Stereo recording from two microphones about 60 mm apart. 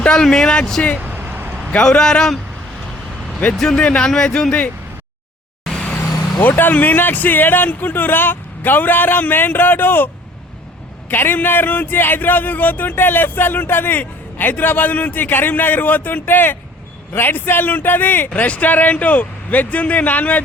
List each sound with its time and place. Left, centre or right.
0.0 s speech: centre
1.0 s vehicle: right
1.7 s speech: centre
3.4 s speech: centre
6.4 s a man's voice: left
11.1 s a man's voice: left